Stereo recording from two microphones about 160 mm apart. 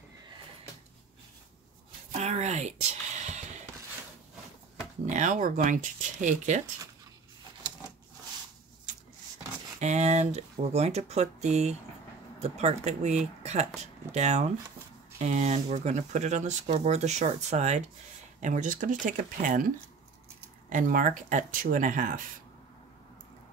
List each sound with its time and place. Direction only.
2.1 s a sound: 45° right (ahead or behind)
5.0 s speech: 50° right (ahead or behind)
9.8 s speech: 45° right (ahead or behind)
20.7 s speech: 55° right (ahead or behind)